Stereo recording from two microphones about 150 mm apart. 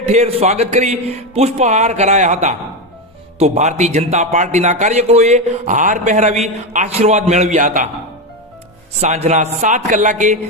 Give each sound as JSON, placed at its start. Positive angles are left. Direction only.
{"t": 0.0, "sound": "a man's voice", "side_deg": -50}
{"t": 9.0, "sound": "a man's voice", "side_deg": -45}